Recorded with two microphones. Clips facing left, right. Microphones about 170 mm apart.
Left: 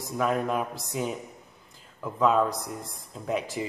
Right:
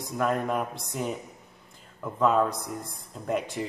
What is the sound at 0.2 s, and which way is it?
A man's voice, centre (ahead or behind).